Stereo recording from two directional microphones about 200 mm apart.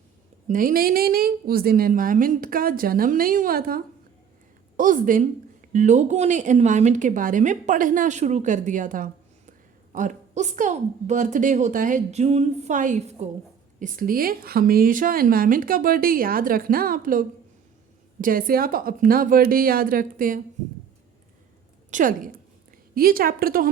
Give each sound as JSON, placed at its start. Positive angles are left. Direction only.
{"t": 0.4, "sound": "a woman's voice", "side_deg": -45}
{"t": 21.8, "sound": "a woman's voice", "side_deg": -40}